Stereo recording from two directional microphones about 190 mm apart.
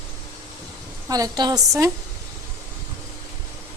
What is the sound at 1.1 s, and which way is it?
Speech, 20° right (ahead or behind).